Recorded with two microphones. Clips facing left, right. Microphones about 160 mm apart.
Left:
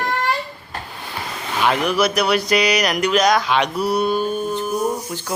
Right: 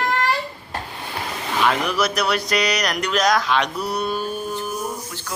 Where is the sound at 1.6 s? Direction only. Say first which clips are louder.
Left 3 dB; centre (ahead or behind).